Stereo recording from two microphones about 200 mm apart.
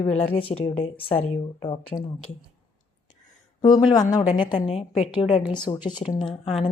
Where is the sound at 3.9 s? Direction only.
20° left (ahead or behind).